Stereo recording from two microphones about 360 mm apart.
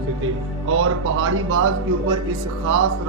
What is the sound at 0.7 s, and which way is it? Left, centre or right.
Speech, right.